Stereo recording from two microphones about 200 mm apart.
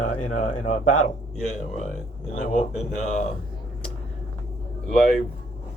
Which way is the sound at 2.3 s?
35° left (ahead or behind).